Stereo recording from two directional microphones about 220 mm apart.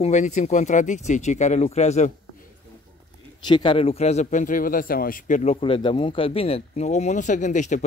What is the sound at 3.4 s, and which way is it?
A man's voice, 20° left (ahead or behind).